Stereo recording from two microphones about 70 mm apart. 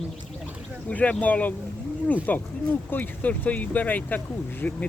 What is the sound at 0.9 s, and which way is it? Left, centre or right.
Speech, centre.